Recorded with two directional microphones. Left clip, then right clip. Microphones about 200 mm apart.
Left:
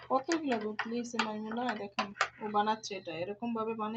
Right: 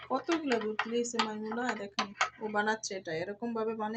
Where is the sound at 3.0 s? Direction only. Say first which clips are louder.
Right 2 dB; 5° left (ahead or behind).